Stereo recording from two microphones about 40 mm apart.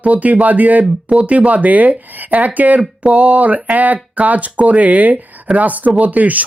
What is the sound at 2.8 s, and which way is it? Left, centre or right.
Speech, right.